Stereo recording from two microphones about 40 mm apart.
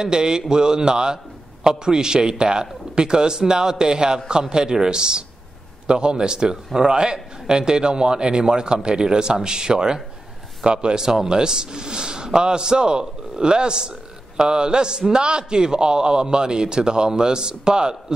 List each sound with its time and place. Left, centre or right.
0.0 s a man's voice: centre